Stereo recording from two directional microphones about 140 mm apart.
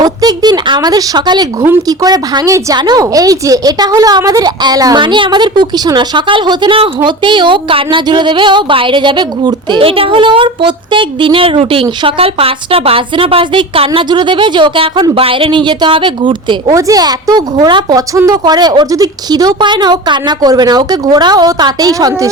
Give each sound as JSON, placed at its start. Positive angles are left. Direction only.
{"t": 0.0, "sound": "a woman's voice", "side_deg": -30}
{"t": 16.7, "sound": "a woman's voice", "side_deg": -25}